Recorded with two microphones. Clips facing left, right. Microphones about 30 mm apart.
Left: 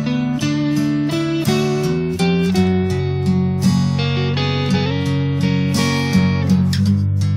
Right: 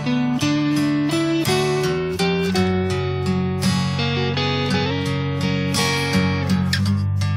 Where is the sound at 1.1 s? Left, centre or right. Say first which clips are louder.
Even; centre.